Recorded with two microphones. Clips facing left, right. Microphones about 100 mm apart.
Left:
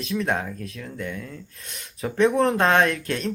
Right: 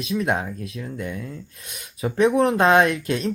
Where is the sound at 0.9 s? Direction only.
15° right (ahead or behind).